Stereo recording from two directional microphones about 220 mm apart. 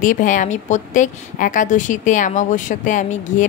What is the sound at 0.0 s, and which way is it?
A woman's voice, 35° left (ahead or behind).